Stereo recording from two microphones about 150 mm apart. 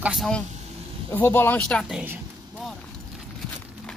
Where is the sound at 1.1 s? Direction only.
15° left (ahead or behind).